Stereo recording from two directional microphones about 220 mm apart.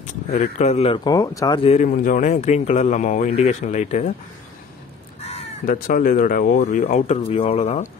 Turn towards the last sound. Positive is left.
turn(degrees=30)  # may be behind; listen again after turning